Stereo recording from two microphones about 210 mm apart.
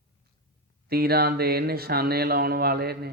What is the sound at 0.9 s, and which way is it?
Speech, 45° right (ahead or behind).